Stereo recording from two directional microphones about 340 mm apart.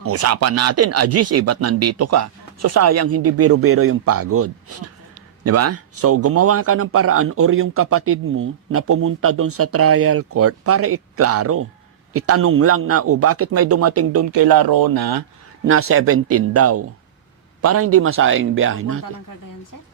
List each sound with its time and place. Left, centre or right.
0.0 s a man's voice: right
14.3 s speech: right
15.6 s a man's voice: right